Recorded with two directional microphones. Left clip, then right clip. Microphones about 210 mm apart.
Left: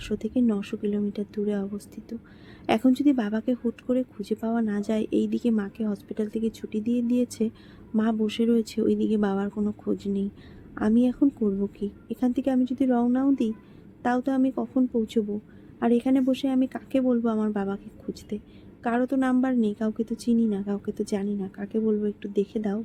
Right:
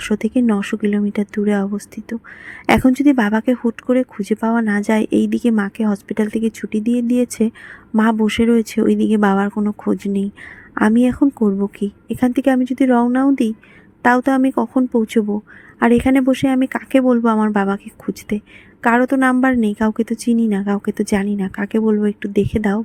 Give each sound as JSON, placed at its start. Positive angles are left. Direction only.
{"t": 0.0, "sound": "speech", "side_deg": -30}